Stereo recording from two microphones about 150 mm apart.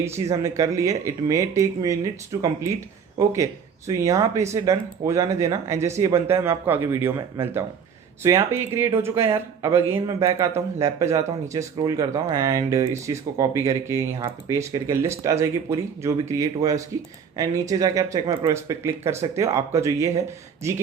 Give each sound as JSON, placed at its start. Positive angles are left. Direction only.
{"t": 0.0, "sound": "speech", "side_deg": -20}